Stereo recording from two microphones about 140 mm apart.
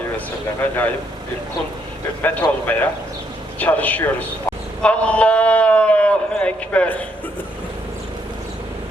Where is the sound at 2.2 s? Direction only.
10° left (ahead or behind).